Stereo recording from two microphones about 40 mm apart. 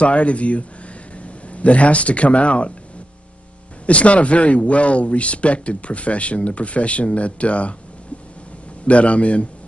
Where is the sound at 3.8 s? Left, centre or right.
Left.